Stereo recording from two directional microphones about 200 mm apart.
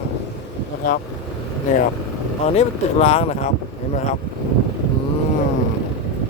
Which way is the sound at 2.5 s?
35° left (ahead or behind).